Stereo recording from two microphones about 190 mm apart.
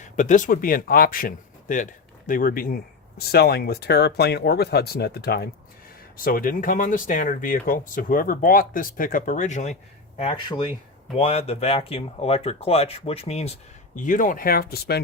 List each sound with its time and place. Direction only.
0.0 s speech: 40° left (ahead or behind)